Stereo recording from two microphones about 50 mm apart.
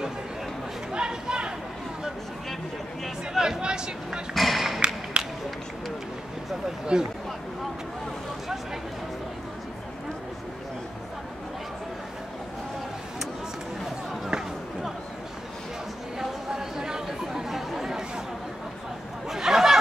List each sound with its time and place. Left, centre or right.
0.9 s chatter: centre
3.3 s a sound: centre
4.3 s music: centre
5.2 s a sound: right
6.9 s speech: centre
16.2 s chatter: centre
19.2 s chatter: centre